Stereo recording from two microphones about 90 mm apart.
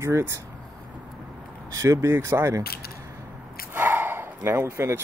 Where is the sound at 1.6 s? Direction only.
35° right (ahead or behind).